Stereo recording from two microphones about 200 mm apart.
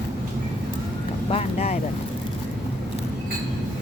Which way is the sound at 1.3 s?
30° left (ahead or behind).